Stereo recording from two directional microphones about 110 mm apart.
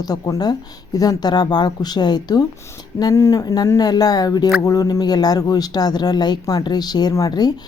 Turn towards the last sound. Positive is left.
turn(degrees=35)  # may be behind; listen again after turning